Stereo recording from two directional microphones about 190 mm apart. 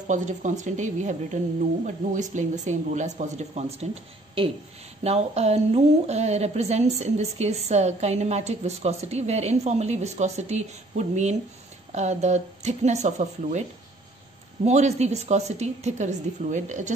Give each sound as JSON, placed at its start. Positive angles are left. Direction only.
{"t": 0.1, "sound": "a woman's voice", "side_deg": -40}